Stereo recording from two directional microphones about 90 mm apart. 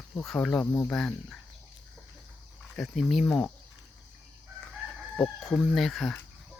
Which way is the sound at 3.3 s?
10° left (ahead or behind).